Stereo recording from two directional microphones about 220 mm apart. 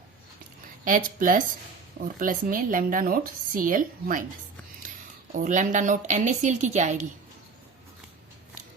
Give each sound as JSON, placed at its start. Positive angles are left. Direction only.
{"t": 0.9, "sound": "speech", "side_deg": -40}
{"t": 5.3, "sound": "speech", "side_deg": -35}